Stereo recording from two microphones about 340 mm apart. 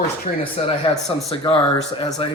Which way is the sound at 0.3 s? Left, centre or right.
Centre.